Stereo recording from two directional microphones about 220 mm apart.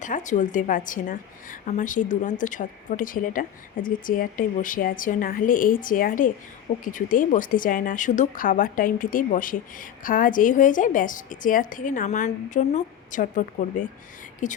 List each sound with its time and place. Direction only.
0.0 s a woman's voice: 35° left (ahead or behind)